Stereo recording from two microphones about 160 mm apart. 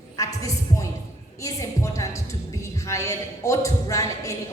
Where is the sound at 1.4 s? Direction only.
20° left (ahead or behind).